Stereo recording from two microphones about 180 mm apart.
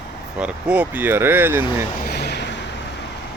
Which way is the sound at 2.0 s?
65° left (ahead or behind).